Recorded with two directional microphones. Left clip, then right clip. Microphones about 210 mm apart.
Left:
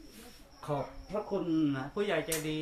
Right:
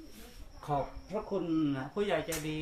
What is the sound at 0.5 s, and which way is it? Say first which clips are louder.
Speech: right 2 dB; centre (ahead or behind).